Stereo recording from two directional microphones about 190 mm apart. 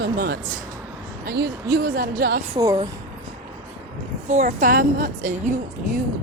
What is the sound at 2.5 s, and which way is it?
Speech, 15° right (ahead or behind).